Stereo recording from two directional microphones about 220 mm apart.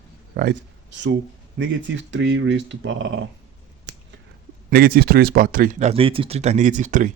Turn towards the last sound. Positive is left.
turn(degrees=-35)  # may be behind; listen again after turning